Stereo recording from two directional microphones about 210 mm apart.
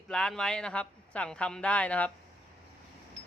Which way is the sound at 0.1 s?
5° left (ahead or behind).